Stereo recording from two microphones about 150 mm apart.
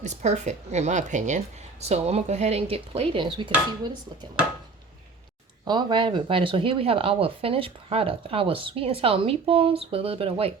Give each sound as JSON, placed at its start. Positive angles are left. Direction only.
{"t": 0.0, "sound": "speech", "side_deg": -50}
{"t": 5.6, "sound": "speech", "side_deg": -30}